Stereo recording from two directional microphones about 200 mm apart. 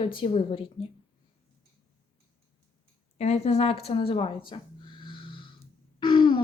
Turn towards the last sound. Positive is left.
turn(degrees=25)  # may be behind; listen again after turning